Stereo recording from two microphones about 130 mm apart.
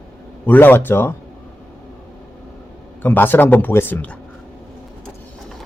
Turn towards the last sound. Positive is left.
turn(degrees=15)  # may be behind; listen again after turning